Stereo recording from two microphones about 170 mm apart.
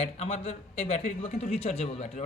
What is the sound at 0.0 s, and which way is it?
A man's voice, 35° left (ahead or behind).